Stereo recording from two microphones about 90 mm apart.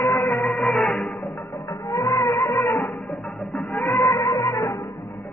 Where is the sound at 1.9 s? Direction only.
40° left (ahead or behind).